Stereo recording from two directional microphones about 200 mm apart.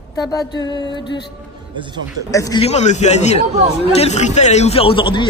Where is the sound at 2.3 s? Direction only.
20° left (ahead or behind).